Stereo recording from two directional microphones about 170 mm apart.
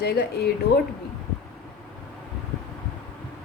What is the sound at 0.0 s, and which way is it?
Speech, 70° left (ahead or behind).